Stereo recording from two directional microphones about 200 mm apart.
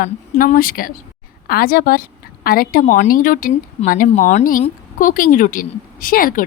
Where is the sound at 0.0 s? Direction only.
45° left (ahead or behind).